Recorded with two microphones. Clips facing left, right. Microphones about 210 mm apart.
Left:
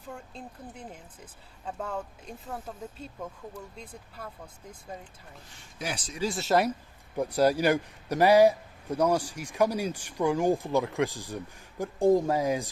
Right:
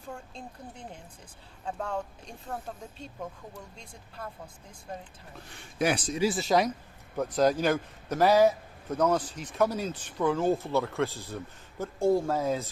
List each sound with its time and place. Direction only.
1.6 s speech: 5° left (ahead or behind)
5.5 s a man's voice: 60° right (ahead or behind)
6.1 s a man's voice: centre (ahead or behind); by 12.6 s 15° left (ahead or behind)